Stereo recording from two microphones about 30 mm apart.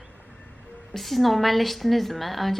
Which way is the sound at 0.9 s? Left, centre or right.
Centre.